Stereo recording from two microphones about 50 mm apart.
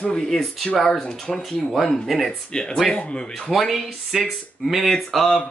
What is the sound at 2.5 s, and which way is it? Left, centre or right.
Speech, centre.